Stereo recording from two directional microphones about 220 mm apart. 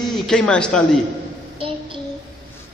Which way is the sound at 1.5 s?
25° right (ahead or behind).